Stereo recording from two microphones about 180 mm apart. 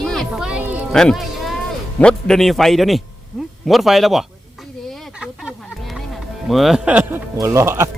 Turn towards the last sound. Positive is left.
turn(degrees=-15)  # may be behind; listen again after turning